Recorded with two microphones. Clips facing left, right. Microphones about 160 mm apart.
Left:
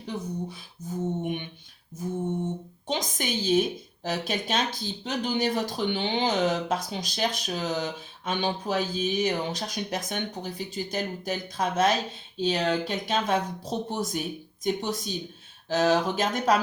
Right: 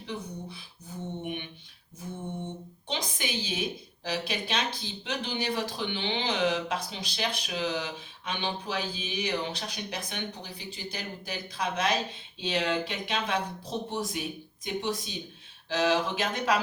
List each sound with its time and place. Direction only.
0.1 s speech: 40° left (ahead or behind)
0.5 s music: 45° left (ahead or behind)
2.8 s a woman's voice: 45° left (ahead or behind)